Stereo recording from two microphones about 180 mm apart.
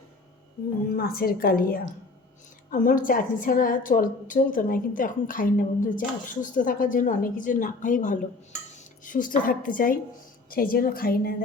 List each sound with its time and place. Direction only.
0.9 s a woman's voice: 60° left (ahead or behind)